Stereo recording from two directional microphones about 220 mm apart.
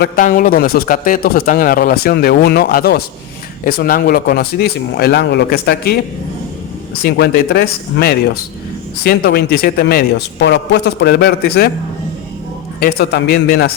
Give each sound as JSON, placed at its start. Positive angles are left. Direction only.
{"t": 0.0, "sound": "a man's voice", "side_deg": 40}
{"t": 7.0, "sound": "a man's voice", "side_deg": 45}
{"t": 12.8, "sound": "a man's voice", "side_deg": 50}